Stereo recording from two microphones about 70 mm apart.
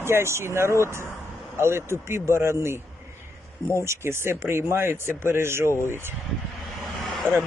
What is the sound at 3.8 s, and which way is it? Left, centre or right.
Speech, right.